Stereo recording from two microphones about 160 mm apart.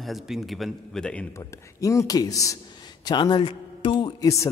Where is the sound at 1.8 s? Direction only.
20° left (ahead or behind).